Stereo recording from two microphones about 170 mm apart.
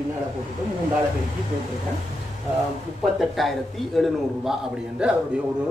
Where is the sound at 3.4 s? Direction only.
Centre (ahead or behind).